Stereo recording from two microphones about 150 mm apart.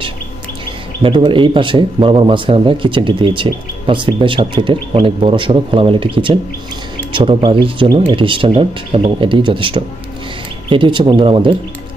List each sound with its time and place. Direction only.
1.0 s speech: 35° right (ahead or behind)
7.1 s speech: 35° right (ahead or behind)